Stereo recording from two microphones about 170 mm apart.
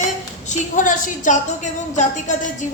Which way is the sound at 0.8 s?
50° left (ahead or behind).